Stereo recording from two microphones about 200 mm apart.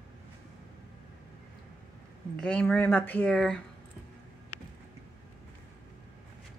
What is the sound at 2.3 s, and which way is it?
A woman's voice, 5° left (ahead or behind).